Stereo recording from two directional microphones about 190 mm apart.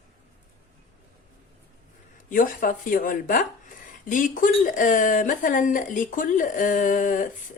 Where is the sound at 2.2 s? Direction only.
45° left (ahead or behind).